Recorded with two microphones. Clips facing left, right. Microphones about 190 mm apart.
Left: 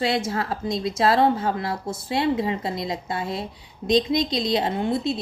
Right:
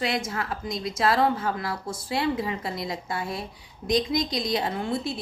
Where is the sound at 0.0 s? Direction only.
30° left (ahead or behind).